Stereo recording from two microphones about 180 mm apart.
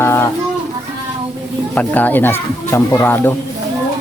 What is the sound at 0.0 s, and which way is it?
Music, 15° left (ahead or behind).